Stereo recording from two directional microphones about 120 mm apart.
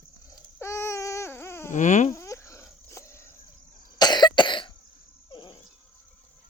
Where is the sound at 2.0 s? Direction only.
25° left (ahead or behind).